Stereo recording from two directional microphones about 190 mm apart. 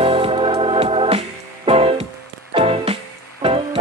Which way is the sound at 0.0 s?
30° right (ahead or behind).